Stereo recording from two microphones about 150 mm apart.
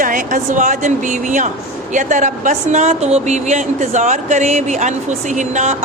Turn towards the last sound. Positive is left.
turn(degrees=-50)  # may be behind; listen again after turning